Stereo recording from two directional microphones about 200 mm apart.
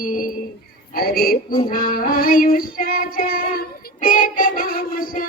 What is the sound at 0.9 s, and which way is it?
Speech, 50° left (ahead or behind).